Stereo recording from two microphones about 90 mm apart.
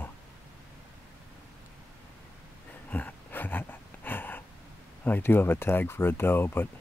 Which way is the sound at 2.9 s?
20° left (ahead or behind).